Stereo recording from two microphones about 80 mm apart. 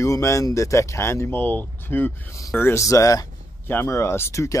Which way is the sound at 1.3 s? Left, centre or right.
Left.